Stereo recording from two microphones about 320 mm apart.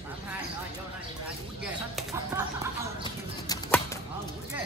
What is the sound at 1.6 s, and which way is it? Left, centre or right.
Speech, centre.